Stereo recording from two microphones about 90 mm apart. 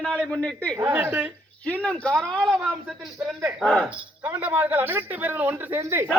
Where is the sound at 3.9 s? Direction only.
20° right (ahead or behind).